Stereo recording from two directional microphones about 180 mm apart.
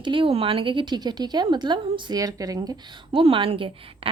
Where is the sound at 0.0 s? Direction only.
30° right (ahead or behind).